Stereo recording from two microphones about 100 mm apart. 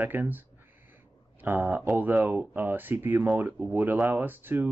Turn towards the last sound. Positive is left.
turn(degrees=-20)  # may be behind; listen again after turning